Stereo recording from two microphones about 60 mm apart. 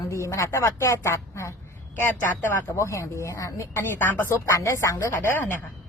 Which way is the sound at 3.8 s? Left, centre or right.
Left.